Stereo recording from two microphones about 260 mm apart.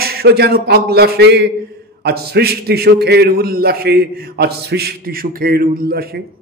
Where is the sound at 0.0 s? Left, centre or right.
Right.